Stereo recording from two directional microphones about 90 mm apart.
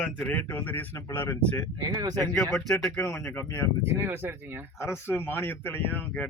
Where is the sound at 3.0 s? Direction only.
35° left (ahead or behind).